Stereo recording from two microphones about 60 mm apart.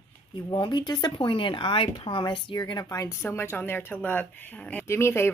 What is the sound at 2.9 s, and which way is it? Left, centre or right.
Speech, left.